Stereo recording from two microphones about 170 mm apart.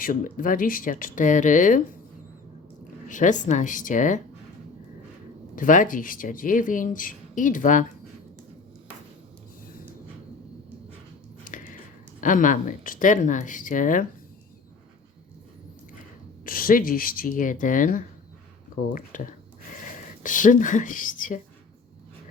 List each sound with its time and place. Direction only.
0.0 s speech: 55° left (ahead or behind)
3.1 s speech: 45° left (ahead or behind)
5.5 s speech: 50° left (ahead or behind)
11.4 s a sound: 50° left (ahead or behind)
12.2 s speech: 50° left (ahead or behind)
16.5 s speech: 55° left (ahead or behind)